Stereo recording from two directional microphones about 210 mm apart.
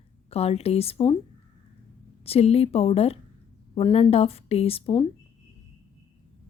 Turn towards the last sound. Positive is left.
turn(degrees=25)  # may be behind; listen again after turning